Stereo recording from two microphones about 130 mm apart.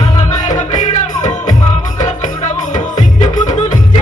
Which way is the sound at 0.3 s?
75° left (ahead or behind).